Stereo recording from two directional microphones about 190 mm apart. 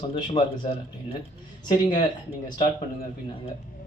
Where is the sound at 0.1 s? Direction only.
25° left (ahead or behind).